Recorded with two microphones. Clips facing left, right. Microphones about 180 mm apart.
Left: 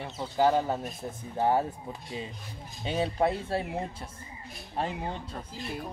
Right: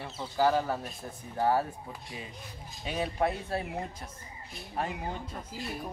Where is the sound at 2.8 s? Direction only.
30° left (ahead or behind).